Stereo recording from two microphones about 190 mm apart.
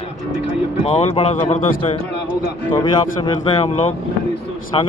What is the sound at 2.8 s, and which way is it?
Speech, 25° left (ahead or behind).